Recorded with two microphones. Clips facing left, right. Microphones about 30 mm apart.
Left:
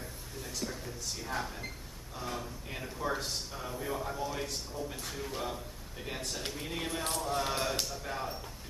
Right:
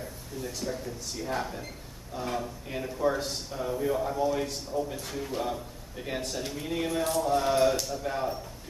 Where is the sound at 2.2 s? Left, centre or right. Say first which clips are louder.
Right 6 dB; centre.